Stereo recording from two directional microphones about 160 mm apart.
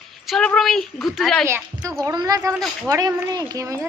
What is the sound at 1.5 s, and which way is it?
A woman's voice, 15° right (ahead or behind).